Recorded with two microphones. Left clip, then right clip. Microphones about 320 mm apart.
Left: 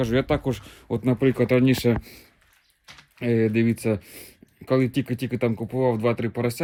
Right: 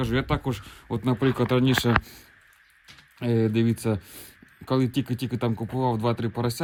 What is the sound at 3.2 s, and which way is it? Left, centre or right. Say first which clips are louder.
Speech: left 3 dB; centre.